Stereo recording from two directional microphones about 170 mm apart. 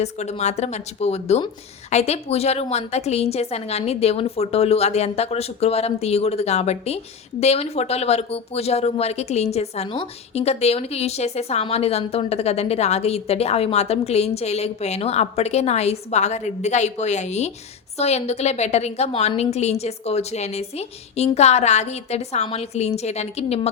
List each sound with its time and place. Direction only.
0.0 s a woman's voice: 40° left (ahead or behind)